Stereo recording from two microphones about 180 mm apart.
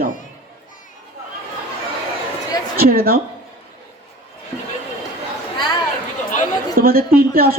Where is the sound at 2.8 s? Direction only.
55° right (ahead or behind).